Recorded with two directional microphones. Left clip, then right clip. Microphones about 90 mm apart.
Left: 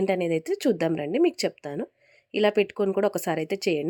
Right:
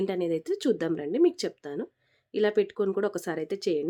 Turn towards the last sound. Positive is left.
turn(degrees=70)  # may be behind; listen again after turning